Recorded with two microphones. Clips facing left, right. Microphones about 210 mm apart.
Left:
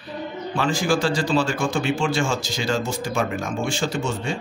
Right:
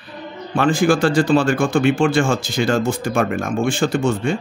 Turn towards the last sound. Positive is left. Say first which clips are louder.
# right 7 dB
turn(degrees=-55)  # may be behind; listen again after turning